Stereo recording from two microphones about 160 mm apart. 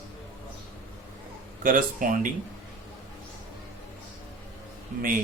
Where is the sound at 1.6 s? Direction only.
60° right (ahead or behind).